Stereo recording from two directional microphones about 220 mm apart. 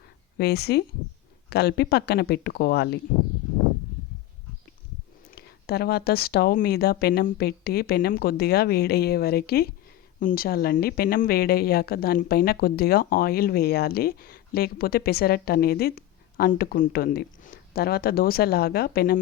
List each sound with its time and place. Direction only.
0.3 s a woman's voice: 45° left (ahead or behind)
5.3 s a woman's voice: 45° left (ahead or behind)